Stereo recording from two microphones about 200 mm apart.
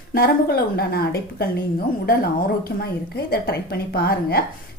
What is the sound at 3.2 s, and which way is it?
Speech, 50° left (ahead or behind).